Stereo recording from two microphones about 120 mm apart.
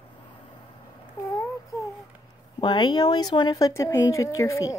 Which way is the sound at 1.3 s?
30° left (ahead or behind).